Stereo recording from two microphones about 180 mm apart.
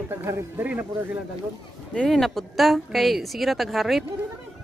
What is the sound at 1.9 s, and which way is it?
A woman's voice, 5° left (ahead or behind).